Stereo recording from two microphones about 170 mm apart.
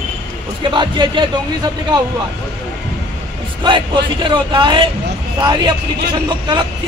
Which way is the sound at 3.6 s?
30° right (ahead or behind).